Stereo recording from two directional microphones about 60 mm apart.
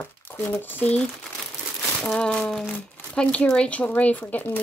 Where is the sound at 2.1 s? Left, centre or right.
Centre.